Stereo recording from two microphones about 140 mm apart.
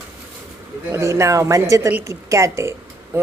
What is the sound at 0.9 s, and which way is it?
Speech, 20° right (ahead or behind).